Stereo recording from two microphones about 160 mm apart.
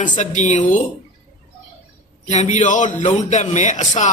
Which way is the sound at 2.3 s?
45° left (ahead or behind).